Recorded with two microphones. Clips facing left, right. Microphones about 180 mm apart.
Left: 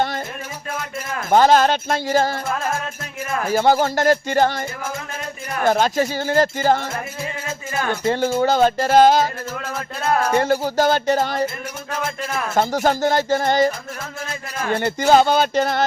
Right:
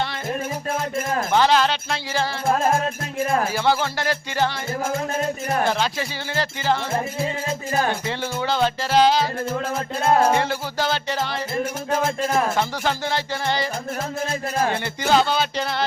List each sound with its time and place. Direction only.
1.3 s music: 45° left (ahead or behind)
2.5 s music: 35° right (ahead or behind)
3.5 s music: 45° left (ahead or behind)
5.1 s music: 35° right (ahead or behind)
5.6 s music: 45° left (ahead or behind)
8.0 s music: 45° left (ahead or behind)
10.0 s music: 30° right (ahead or behind)
10.3 s music: 45° left (ahead or behind)
11.5 s music: 30° right (ahead or behind)
12.5 s music: 45° left (ahead or behind)
14.7 s music: 50° left (ahead or behind)